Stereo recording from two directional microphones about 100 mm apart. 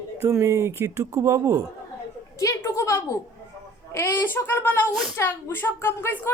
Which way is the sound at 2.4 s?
30° left (ahead or behind).